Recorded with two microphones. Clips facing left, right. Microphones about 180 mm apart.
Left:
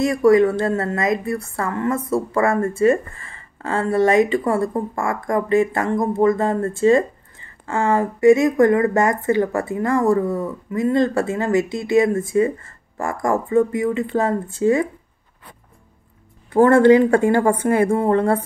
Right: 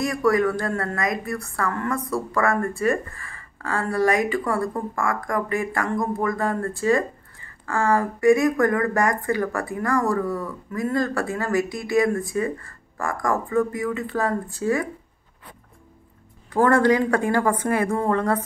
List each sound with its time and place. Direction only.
0.0 s a woman's voice: 25° left (ahead or behind)
16.4 s a woman's voice: 25° left (ahead or behind)